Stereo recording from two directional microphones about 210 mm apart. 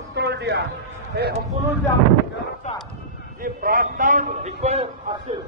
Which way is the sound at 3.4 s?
40° right (ahead or behind).